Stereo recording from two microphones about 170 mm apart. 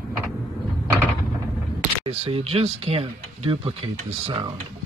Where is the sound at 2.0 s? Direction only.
35° right (ahead or behind).